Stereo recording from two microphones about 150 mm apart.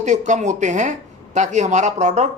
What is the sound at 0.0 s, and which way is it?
Speech, 55° right (ahead or behind).